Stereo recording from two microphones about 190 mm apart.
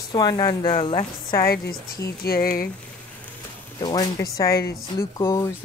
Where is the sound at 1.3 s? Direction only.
50° left (ahead or behind).